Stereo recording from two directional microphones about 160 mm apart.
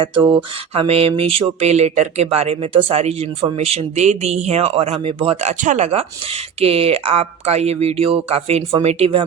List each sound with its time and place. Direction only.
0.3 s speech: 35° right (ahead or behind)